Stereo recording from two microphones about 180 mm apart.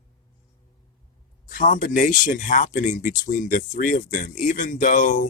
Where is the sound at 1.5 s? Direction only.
50° left (ahead or behind).